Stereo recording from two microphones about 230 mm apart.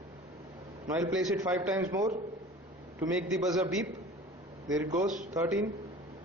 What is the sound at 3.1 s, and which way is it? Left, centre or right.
Speech, centre.